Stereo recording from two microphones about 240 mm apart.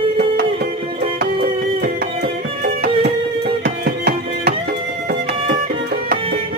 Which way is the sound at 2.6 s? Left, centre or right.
Right.